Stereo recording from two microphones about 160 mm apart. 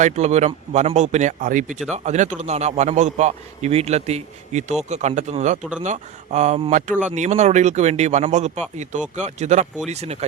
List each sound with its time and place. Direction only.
0.0 s a man's voice: 45° right (ahead or behind)